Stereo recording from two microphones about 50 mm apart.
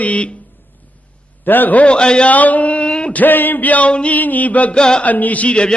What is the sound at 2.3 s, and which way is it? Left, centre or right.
Speech, left.